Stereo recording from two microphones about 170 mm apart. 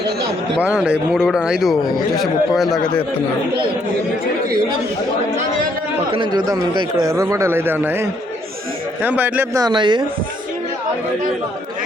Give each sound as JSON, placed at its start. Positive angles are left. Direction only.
{"t": 0.8, "sound": "speech", "side_deg": -5}
{"t": 6.1, "sound": "a man's voice", "side_deg": -25}
{"t": 9.6, "sound": "speech", "side_deg": -25}